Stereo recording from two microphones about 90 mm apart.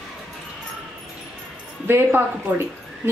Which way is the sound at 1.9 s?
25° right (ahead or behind).